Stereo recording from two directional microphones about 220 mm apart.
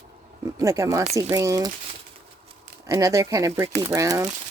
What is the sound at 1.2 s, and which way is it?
Speech, 15° right (ahead or behind).